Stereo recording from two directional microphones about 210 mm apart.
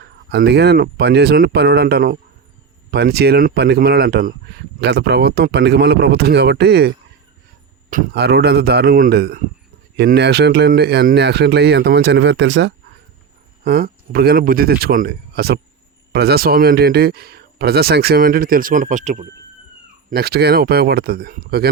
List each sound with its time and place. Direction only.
0.0 s speech: 50° right (ahead or behind)
13.7 s speech: 45° right (ahead or behind)
20.1 s speech: 45° right (ahead or behind)